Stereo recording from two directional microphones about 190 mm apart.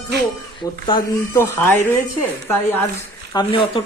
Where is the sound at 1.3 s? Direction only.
15° left (ahead or behind).